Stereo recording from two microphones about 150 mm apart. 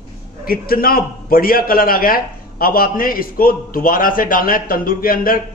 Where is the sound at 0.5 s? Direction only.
80° left.